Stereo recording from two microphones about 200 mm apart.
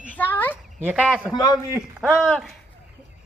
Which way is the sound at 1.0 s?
Centre (ahead or behind).